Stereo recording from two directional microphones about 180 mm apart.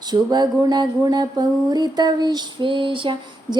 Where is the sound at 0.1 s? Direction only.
20° right (ahead or behind).